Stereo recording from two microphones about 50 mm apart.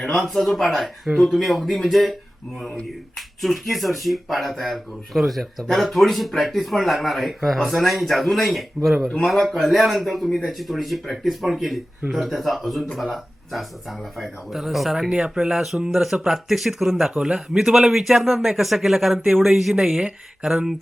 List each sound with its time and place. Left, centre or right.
0.2 s speech: centre
3.2 s speech: centre
15.1 s speech: centre
17.2 s speech: centre